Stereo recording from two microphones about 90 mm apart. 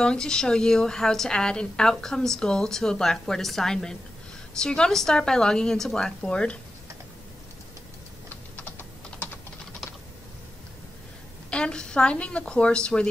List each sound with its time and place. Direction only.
0.0 s a woman's voice: 10° left (ahead or behind)
8.5 s typing: 25° left (ahead or behind)
11.5 s a woman's voice: 10° left (ahead or behind)